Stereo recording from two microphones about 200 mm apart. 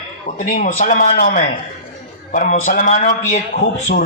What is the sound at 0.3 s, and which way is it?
A man's voice, 40° left (ahead or behind).